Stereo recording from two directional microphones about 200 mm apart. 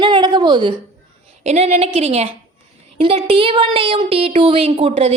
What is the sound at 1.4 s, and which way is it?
A woman's voice, 35° right (ahead or behind).